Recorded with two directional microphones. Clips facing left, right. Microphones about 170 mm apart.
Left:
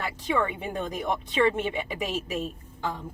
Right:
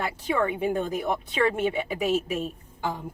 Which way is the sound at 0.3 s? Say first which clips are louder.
Right 3 dB; 10° right (ahead or behind).